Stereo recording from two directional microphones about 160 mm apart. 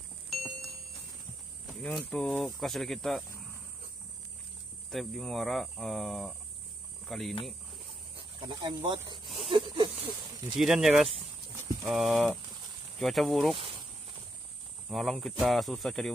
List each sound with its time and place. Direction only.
0.3 s music: centre (ahead or behind)
1.7 s speech: 5° left (ahead or behind)
4.9 s speech: centre (ahead or behind)
8.2 s speech: 30° right (ahead or behind)
9.5 s a sound: 35° right (ahead or behind)
10.5 s speech: centre (ahead or behind)
14.9 s speech: centre (ahead or behind)